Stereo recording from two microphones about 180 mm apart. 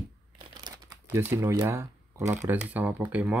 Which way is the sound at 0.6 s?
20° right (ahead or behind).